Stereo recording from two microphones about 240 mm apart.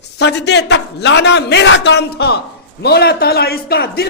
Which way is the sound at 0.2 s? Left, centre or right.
Left.